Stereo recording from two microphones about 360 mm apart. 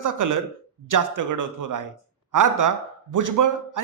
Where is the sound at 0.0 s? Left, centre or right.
Right.